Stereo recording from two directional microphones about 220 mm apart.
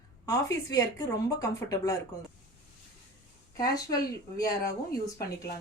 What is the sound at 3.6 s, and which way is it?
A woman's voice, 15° left (ahead or behind).